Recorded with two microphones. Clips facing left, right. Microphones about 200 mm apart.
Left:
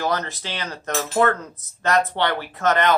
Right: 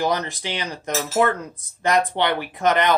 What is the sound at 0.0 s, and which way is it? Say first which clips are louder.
Speech: right 2 dB; 15° right (ahead or behind).